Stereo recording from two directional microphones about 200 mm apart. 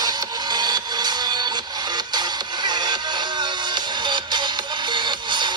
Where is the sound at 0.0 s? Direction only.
20° right (ahead or behind).